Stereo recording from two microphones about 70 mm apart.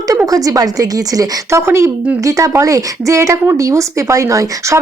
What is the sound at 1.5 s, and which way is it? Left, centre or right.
A woman's voice, right.